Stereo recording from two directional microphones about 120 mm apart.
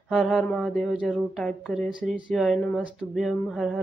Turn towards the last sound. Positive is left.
turn(degrees=-5)  # may be behind; listen again after turning